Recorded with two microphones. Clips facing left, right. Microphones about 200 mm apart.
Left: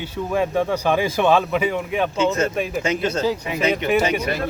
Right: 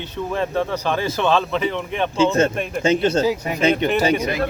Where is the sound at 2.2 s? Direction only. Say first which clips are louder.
Right 5 dB; 30° right (ahead or behind).